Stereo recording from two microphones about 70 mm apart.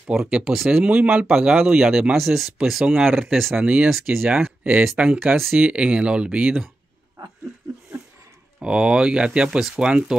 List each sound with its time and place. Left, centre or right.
0.1 s speech: centre
0.8 s speech: right
1.3 s speech: centre
3.5 s speech: right
8.5 s speech: centre